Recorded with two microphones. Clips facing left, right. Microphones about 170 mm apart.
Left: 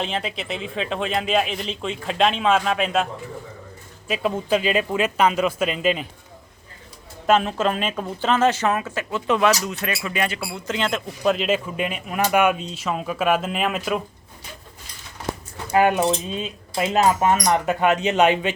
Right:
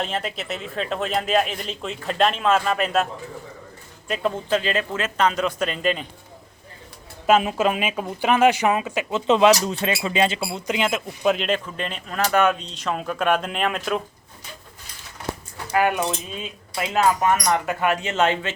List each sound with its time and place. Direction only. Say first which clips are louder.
0.0 s a man's voice: even; centre (ahead or behind)
4.1 s speech: left 1 dB; 10° left (ahead or behind)
7.3 s speech: right 1 dB; 5° right (ahead or behind)
15.7 s speech: left 3 dB; 25° left (ahead or behind)